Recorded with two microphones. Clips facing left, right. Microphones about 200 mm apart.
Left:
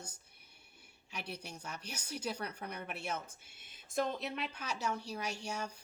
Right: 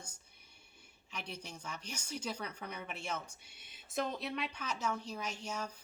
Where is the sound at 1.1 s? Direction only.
10° left (ahead or behind).